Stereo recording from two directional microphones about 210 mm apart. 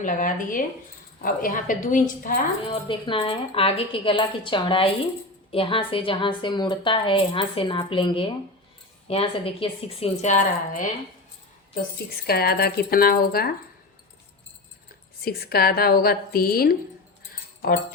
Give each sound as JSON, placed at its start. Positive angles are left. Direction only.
{"t": 0.0, "sound": "a woman's voice", "side_deg": 40}
{"t": 2.8, "sound": "a woman's voice", "side_deg": 25}
{"t": 12.2, "sound": "a woman's voice", "side_deg": 50}
{"t": 15.2, "sound": "a woman's voice", "side_deg": 45}